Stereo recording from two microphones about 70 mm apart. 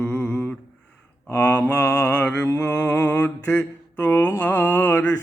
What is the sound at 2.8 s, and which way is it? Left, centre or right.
Mantra, left.